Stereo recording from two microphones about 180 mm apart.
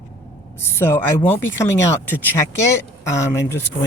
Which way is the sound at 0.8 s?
10° left (ahead or behind).